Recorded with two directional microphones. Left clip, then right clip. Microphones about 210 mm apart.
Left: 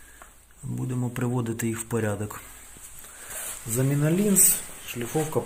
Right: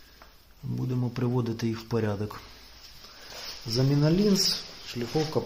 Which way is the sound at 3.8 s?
15° right (ahead or behind).